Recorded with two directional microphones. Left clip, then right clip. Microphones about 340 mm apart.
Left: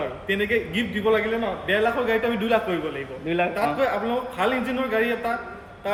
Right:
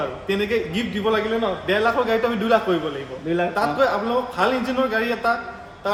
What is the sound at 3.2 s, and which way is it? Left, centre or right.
Speech, centre.